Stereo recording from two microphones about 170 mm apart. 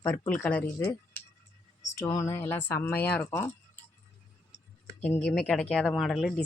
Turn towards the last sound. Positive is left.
turn(degrees=0)  # may be behind; listen again after turning